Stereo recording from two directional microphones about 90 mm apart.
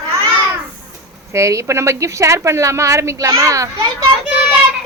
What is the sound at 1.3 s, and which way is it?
A woman's voice, 35° right (ahead or behind).